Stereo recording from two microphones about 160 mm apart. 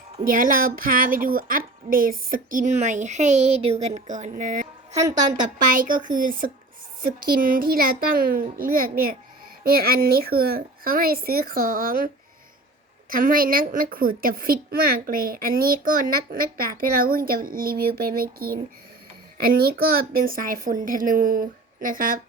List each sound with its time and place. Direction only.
0.3 s a woman's voice: 60° right (ahead or behind)